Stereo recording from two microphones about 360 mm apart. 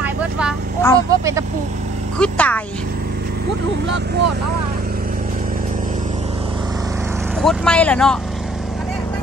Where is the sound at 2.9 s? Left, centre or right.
Right; by 9.1 s centre.